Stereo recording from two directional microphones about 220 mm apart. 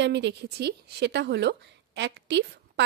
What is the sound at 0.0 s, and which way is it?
Speech, 50° right (ahead or behind).